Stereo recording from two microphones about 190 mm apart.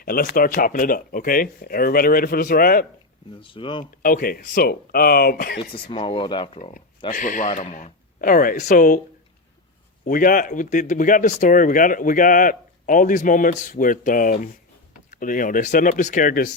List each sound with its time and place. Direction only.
0.0 s speech: 50° left (ahead or behind)
3.4 s speech: 25° left (ahead or behind)
4.0 s speech: 45° left (ahead or behind)
5.7 s speech: 30° left (ahead or behind)
7.1 s speech: 45° left (ahead or behind)
10.1 s speech: 45° left (ahead or behind)